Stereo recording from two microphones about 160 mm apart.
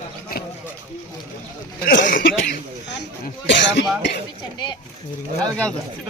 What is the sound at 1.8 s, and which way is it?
Throat clearing, 60° left (ahead or behind).